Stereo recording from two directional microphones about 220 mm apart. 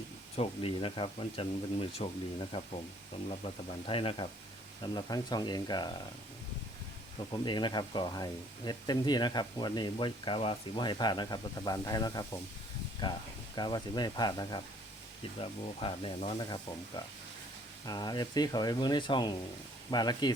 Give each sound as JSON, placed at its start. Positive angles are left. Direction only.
{"t": 0.3, "sound": "speech", "side_deg": 25}
{"t": 7.3, "sound": "speech", "side_deg": 20}
{"t": 13.6, "sound": "speech", "side_deg": 20}
{"t": 17.8, "sound": "speech", "side_deg": 20}